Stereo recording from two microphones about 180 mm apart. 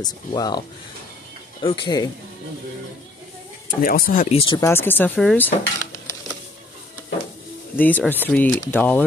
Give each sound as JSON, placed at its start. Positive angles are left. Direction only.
{"t": 0.0, "sound": "speech", "side_deg": 20}
{"t": 1.6, "sound": "speech", "side_deg": 25}
{"t": 3.6, "sound": "speech", "side_deg": 50}
{"t": 4.6, "sound": "speech", "side_deg": 15}
{"t": 5.8, "sound": "stir", "side_deg": 15}
{"t": 7.7, "sound": "speech", "side_deg": 10}